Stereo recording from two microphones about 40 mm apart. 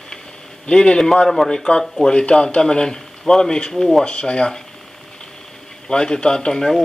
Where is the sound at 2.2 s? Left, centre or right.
Left.